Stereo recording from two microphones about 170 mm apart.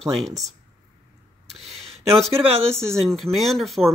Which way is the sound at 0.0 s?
Centre (ahead or behind).